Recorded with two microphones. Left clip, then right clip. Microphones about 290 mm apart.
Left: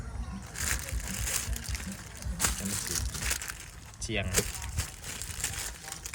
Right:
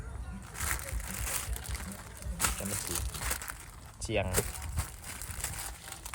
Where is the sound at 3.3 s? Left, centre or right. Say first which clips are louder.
Left 4 dB; centre.